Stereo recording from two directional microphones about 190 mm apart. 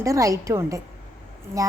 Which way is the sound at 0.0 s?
15° right (ahead or behind).